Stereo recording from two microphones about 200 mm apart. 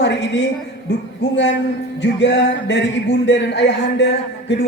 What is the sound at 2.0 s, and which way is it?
A man's voice, 60° left (ahead or behind).